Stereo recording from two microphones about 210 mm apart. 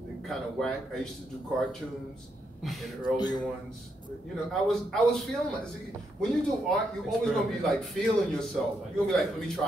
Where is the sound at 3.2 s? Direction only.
20° left (ahead or behind).